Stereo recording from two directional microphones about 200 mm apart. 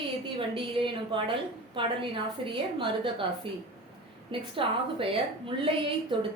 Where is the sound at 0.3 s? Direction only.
25° right (ahead or behind).